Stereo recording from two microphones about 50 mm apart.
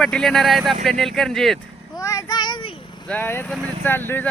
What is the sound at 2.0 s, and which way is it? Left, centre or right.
Child singing, left.